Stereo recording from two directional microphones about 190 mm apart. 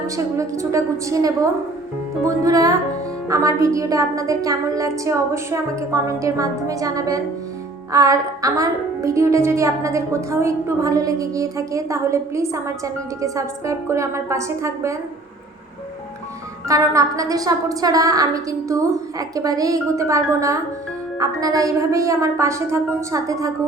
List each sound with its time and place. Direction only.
0.3 s a woman's voice: 15° right (ahead or behind)
16.6 s a woman's voice: 15° right (ahead or behind)